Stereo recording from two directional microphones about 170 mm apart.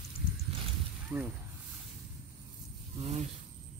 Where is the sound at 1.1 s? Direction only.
20° right (ahead or behind).